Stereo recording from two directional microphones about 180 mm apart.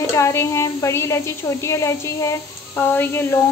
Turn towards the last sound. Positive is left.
turn(degrees=10)  # may be behind; listen again after turning